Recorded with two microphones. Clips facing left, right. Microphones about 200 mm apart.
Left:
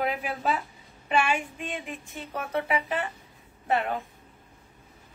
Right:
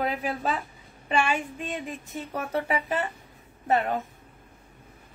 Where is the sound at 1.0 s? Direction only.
35° right (ahead or behind).